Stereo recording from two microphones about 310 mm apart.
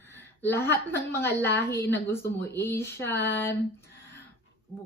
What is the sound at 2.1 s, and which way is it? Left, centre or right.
Speech, centre.